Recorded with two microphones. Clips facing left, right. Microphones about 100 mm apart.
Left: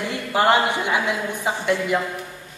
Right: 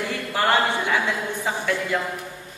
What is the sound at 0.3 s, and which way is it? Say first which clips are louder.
A woman's voice: left 3 dB; 20° left (ahead or behind).